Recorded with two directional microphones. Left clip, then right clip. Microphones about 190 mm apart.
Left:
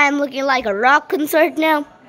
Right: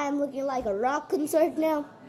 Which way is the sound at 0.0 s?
20° left (ahead or behind).